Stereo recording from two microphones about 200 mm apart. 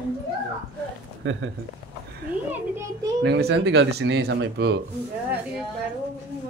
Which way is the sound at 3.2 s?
60° right (ahead or behind).